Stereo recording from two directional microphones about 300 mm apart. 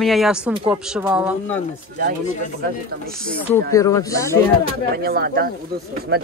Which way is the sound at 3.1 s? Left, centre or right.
Centre.